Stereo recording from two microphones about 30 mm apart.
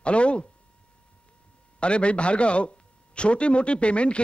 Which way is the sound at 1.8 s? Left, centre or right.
Left.